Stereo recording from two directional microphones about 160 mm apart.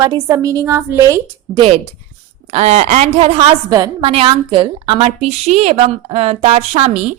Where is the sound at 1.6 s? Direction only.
35° right (ahead or behind).